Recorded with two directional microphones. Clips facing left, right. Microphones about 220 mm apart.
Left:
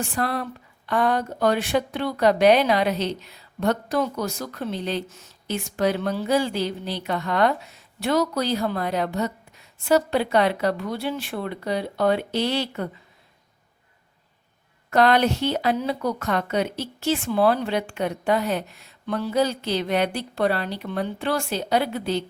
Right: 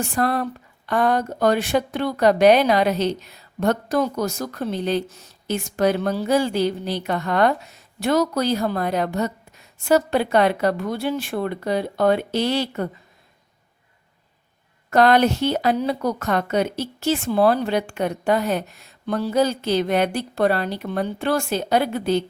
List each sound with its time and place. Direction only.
0.0 s speech: 45° right (ahead or behind)
14.8 s speech: 45° right (ahead or behind)